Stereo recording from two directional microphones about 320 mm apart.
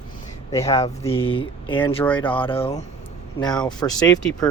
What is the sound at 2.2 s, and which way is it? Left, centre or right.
Speech, centre.